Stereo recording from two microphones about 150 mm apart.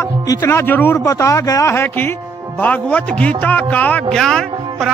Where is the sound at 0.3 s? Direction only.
15° left (ahead or behind).